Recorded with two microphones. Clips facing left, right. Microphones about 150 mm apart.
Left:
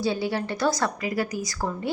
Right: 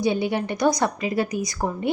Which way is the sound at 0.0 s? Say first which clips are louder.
Right 3 dB; 20° right (ahead or behind).